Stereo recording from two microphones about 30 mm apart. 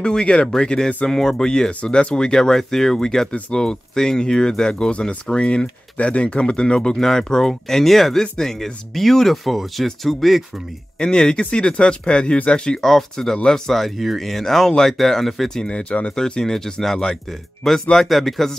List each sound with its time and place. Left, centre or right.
0.0 s speech: left
1.0 s speech: left
1.9 s speech: left
2.1 s speech: left
7.0 s speech: centre
11.0 s speech: left
12.7 s speech: centre
15.6 s speech: left
16.2 s speech: left
17.6 s speech: centre